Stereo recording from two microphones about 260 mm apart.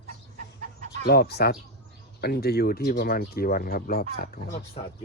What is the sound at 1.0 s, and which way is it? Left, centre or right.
Speech, left.